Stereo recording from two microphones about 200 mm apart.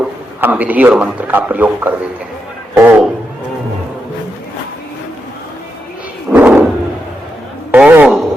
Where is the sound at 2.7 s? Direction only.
10° right (ahead or behind).